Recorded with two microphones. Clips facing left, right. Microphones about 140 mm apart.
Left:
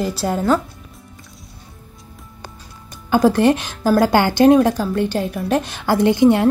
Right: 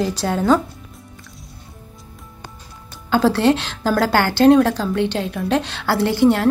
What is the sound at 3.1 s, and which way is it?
A woman's voice, 15° left (ahead or behind).